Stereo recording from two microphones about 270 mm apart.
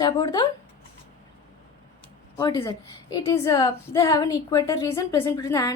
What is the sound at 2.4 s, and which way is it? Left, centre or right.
A woman's voice, centre.